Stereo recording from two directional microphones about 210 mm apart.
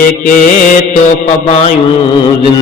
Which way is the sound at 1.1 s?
25° left (ahead or behind).